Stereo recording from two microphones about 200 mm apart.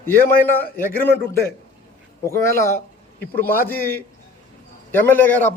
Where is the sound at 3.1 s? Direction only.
10° left (ahead or behind).